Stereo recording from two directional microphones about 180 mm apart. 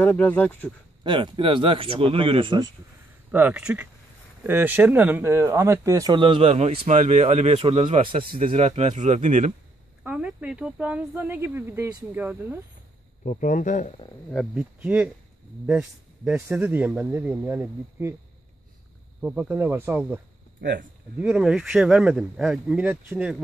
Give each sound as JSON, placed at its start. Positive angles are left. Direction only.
{"t": 0.0, "sound": "speech", "side_deg": 10}
{"t": 1.0, "sound": "speech", "side_deg": -25}
{"t": 3.3, "sound": "speech", "side_deg": -10}
{"t": 10.0, "sound": "speech", "side_deg": -5}
{"t": 13.2, "sound": "speech", "side_deg": 45}
{"t": 14.3, "sound": "speech", "side_deg": 0}
{"t": 19.2, "sound": "speech", "side_deg": -10}
{"t": 20.6, "sound": "speech", "side_deg": -60}
{"t": 21.2, "sound": "speech", "side_deg": -5}